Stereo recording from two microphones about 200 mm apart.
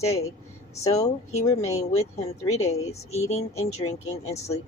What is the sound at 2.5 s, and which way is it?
Speech, 35° left (ahead or behind).